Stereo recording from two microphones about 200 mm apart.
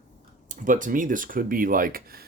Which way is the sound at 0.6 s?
40° right (ahead or behind).